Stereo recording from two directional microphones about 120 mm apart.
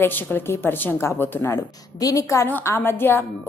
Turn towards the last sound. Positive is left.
turn(degrees=15)  # may be behind; listen again after turning